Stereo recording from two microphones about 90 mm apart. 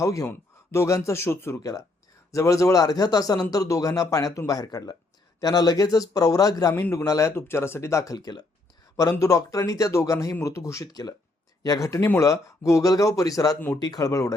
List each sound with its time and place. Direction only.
0.0 s speech: 35° left (ahead or behind)
6.7 s speech: 30° left (ahead or behind)
10.8 s speech: 50° left (ahead or behind)